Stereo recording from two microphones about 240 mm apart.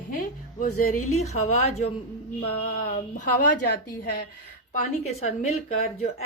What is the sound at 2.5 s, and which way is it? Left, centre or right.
A woman's voice, left.